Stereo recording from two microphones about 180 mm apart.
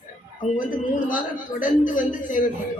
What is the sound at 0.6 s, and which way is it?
A woman's voice, 50° left (ahead or behind).